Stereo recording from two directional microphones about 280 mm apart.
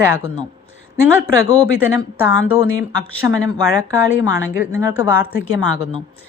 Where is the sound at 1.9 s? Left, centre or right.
Centre.